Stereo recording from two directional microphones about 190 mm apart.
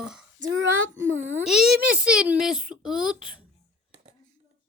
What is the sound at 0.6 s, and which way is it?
Child singing, 90° right.